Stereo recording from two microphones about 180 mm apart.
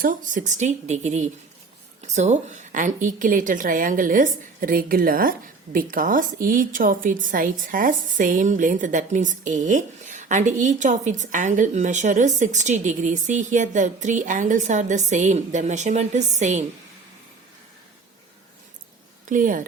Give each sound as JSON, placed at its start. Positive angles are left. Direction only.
{"t": 0.0, "sound": "a woman's voice", "side_deg": -45}
{"t": 19.3, "sound": "a woman's voice", "side_deg": -50}